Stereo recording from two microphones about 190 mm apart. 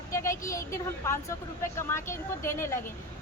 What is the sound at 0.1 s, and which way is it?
A woman's voice, 15° left (ahead or behind).